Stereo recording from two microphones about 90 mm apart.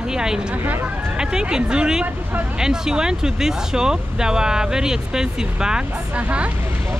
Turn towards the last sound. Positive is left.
turn(degrees=-15)  # may be behind; listen again after turning